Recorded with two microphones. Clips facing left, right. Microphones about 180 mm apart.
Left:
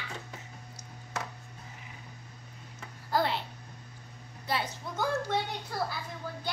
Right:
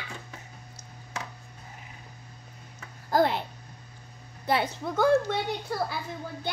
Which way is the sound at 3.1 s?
50° right (ahead or behind).